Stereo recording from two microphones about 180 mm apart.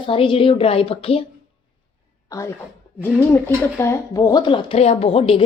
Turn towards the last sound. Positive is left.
turn(degrees=30)  # may be behind; listen again after turning